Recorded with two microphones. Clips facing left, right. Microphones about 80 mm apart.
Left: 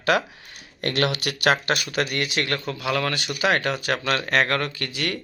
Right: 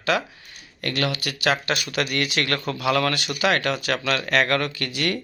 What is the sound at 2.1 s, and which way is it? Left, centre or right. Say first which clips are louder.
Speech: right 1 dB; centre.